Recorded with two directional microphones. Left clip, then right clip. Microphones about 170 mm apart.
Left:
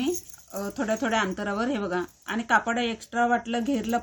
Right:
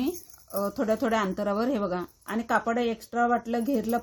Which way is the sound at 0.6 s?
40° right (ahead or behind).